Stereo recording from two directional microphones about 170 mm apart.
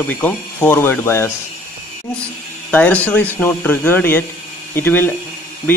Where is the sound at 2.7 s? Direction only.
10° left (ahead or behind).